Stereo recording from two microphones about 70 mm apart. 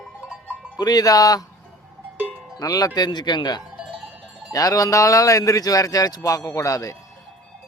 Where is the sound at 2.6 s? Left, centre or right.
Left.